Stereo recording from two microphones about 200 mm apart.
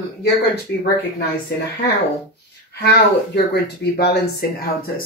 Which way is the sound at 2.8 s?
55° left (ahead or behind).